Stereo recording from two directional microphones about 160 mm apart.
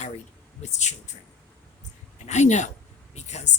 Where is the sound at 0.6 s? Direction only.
45° left (ahead or behind).